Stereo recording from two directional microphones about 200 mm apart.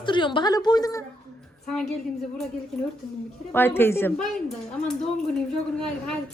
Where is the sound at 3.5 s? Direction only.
10° left (ahead or behind).